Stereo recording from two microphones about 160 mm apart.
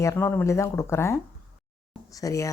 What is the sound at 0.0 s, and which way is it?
Speech, 15° left (ahead or behind).